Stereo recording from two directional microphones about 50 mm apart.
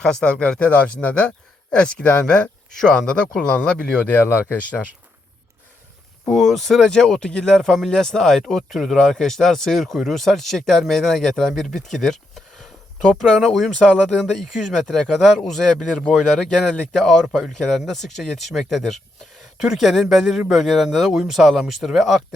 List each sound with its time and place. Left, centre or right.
0.0 s speech: centre
6.2 s speech: centre
13.9 s speech: centre
19.6 s speech: centre